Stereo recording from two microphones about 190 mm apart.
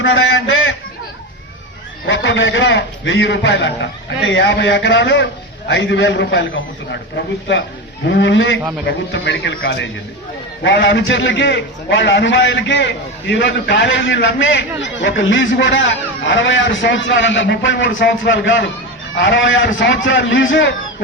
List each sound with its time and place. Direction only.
0.0 s a sound: 90° left
2.0 s a man's voice: 80° left
8.0 s a man's voice: 75° left (ahead or behind)